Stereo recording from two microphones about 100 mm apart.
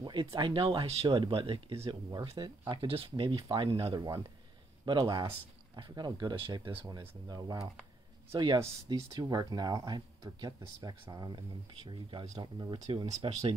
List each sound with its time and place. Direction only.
0.0 s speech: 50° right (ahead or behind)
2.3 s speech: 45° right (ahead or behind); by 3.9 s 65° right (ahead or behind)
3.9 s speech: 40° right (ahead or behind)
13.2 s speech: 90° right